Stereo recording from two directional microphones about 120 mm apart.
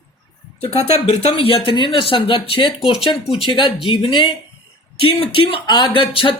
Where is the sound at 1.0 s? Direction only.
60° left (ahead or behind).